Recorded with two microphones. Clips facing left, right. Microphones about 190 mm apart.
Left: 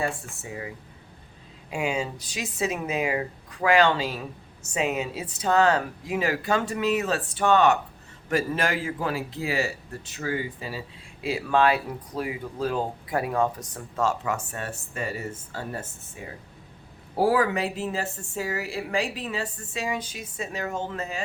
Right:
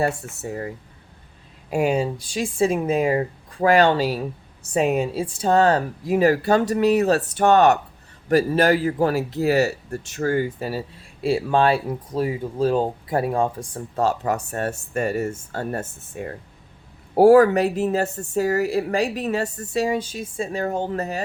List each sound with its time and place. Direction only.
0.0 s speech: 45° right (ahead or behind)
2.0 s speech: 30° right (ahead or behind); by 11.3 s 45° right (ahead or behind)
11.3 s speech: 30° right (ahead or behind)